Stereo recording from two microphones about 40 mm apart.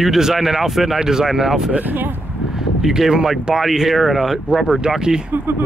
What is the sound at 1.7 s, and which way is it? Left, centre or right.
Speech, right.